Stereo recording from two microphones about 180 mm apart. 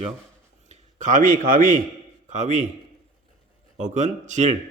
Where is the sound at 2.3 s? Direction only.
40° right (ahead or behind).